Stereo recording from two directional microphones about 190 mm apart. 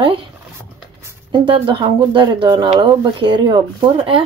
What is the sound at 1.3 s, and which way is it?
Speech, 25° right (ahead or behind).